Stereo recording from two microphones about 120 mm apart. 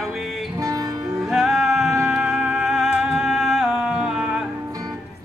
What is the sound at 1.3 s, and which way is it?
Music, 5° right (ahead or behind).